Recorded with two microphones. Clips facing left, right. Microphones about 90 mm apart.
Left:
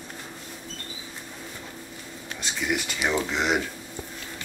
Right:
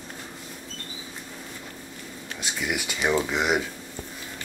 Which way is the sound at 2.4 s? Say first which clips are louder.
Left 1 dB; 5° right (ahead or behind).